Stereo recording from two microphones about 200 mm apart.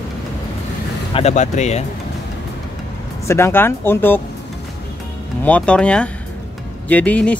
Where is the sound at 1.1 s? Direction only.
35° left (ahead or behind).